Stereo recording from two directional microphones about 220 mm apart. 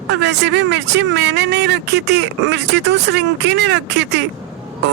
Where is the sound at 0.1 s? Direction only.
50° right (ahead or behind).